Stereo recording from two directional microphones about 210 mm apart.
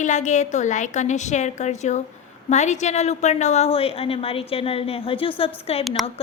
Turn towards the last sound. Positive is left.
turn(degrees=25)  # may be behind; listen again after turning